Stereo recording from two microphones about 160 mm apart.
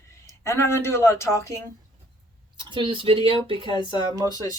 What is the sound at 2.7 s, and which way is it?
Speech, 30° right (ahead or behind).